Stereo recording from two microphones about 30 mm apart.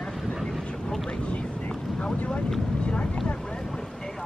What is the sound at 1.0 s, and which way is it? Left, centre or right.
Vehicle, left.